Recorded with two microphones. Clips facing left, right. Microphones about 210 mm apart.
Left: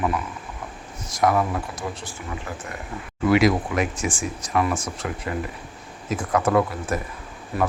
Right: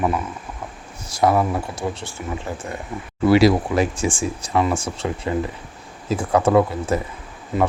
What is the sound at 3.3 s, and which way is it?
Speech, 30° right (ahead or behind).